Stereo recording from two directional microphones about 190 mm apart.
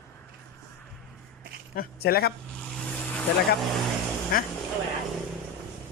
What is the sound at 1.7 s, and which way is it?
Speech, 50° left (ahead or behind).